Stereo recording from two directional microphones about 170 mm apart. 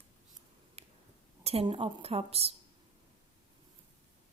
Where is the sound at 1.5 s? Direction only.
35° right (ahead or behind).